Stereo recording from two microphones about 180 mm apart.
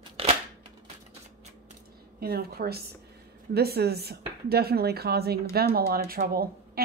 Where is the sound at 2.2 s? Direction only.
60° right (ahead or behind).